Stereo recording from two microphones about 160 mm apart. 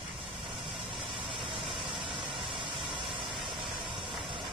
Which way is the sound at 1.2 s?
35° right (ahead or behind).